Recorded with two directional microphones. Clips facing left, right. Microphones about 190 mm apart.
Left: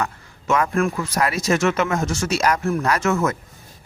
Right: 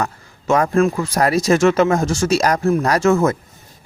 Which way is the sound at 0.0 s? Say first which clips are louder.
Right 3 dB; 35° right (ahead or behind).